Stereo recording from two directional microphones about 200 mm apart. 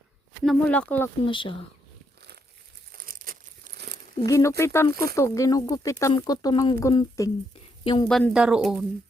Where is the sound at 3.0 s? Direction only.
45° right (ahead or behind).